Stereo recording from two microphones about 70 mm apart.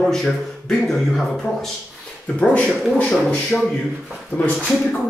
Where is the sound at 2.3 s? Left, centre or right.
Centre.